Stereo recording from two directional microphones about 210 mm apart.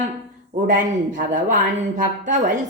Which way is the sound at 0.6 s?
35° right (ahead or behind).